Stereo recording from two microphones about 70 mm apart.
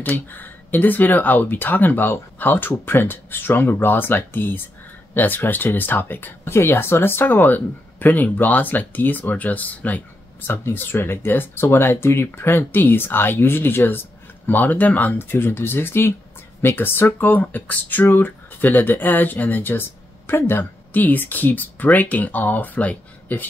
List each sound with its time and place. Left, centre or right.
0.1 s speech: left